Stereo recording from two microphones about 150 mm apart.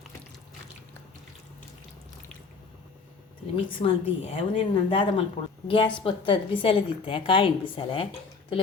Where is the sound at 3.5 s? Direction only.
40° left (ahead or behind).